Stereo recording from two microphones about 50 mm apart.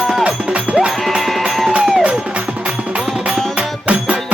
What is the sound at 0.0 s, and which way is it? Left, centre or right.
Music, centre.